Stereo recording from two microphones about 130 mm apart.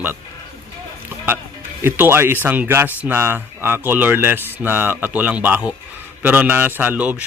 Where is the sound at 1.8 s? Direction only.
20° right (ahead or behind).